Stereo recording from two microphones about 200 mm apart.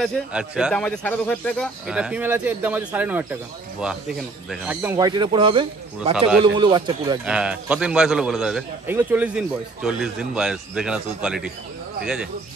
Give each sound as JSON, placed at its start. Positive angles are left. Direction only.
{"t": 0.0, "sound": "a man's voice", "side_deg": -5}
{"t": 4.9, "sound": "speech", "side_deg": -20}
{"t": 7.2, "sound": "a man's voice", "side_deg": -5}